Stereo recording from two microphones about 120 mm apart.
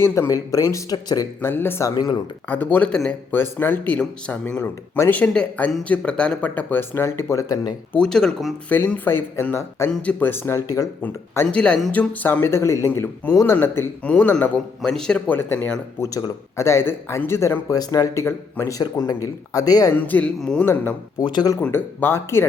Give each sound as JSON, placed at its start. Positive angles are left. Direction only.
{"t": 0.0, "sound": "speech", "side_deg": 25}
{"t": 1.4, "sound": "speech", "side_deg": 20}
{"t": 1.9, "sound": "speech", "side_deg": 35}
{"t": 2.5, "sound": "speech", "side_deg": 15}
{"t": 7.9, "sound": "speech", "side_deg": 5}
{"t": 8.7, "sound": "speech", "side_deg": 15}
{"t": 11.4, "sound": "speech", "side_deg": 10}
{"t": 15.4, "sound": "speech", "side_deg": 15}
{"t": 16.0, "sound": "speech", "side_deg": 30}
{"t": 19.9, "sound": "speech", "side_deg": 15}
{"t": 21.2, "sound": "speech", "side_deg": 35}
{"t": 21.6, "sound": "speech", "side_deg": 15}